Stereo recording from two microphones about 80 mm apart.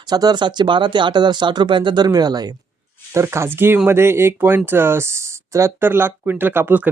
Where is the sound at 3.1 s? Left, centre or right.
Right.